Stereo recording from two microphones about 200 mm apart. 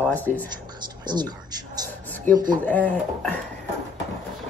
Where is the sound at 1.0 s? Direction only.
20° right (ahead or behind).